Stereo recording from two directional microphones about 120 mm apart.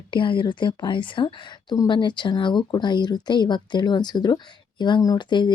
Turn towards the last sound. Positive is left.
turn(degrees=40)  # may be behind; listen again after turning